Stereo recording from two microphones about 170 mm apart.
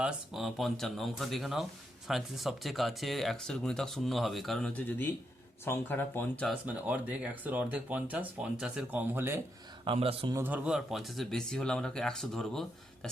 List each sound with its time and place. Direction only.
0.0 s speech: centre (ahead or behind)
6.5 s speech: 10° right (ahead or behind)
9.8 s a man's voice: 35° right (ahead or behind)
10.3 s speech: 10° right (ahead or behind)